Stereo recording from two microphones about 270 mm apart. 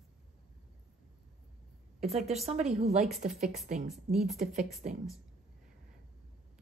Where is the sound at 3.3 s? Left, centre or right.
Centre.